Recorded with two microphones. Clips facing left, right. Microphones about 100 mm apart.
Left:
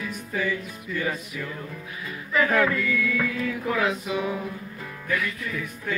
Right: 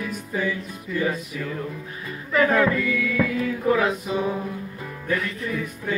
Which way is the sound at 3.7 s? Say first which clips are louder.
Right 3 dB; 25° right (ahead or behind).